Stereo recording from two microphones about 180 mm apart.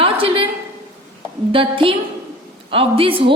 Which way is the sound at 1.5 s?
30° right (ahead or behind).